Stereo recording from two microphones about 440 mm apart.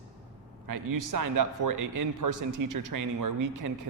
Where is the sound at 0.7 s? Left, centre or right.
Right.